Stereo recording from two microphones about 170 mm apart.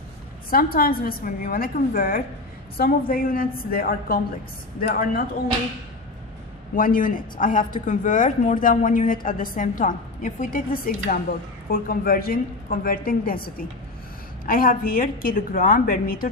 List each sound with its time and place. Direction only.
0.5 s a woman's voice: 60° left (ahead or behind)
6.7 s a woman's voice: 55° left (ahead or behind)